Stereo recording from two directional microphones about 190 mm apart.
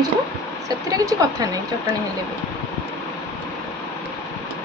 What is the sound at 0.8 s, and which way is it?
Speech, 20° right (ahead or behind).